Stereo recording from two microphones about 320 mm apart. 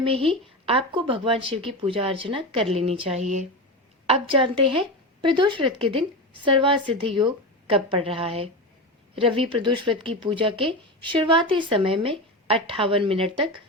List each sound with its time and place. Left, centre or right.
0.0 s speech: centre